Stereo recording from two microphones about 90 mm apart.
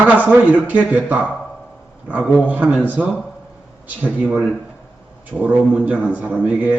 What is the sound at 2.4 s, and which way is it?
Speech, 15° right (ahead or behind).